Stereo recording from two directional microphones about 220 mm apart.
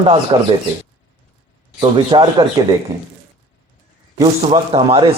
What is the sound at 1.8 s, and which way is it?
Speech, 20° right (ahead or behind).